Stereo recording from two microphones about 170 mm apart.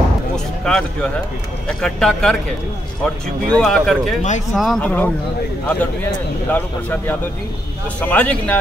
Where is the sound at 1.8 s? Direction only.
5° left (ahead or behind).